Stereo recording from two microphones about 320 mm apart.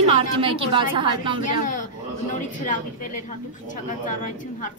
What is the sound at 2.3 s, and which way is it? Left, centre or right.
A woman's voice, left.